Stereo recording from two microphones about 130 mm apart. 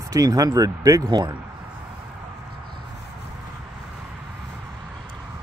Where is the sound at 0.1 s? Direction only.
30° right (ahead or behind).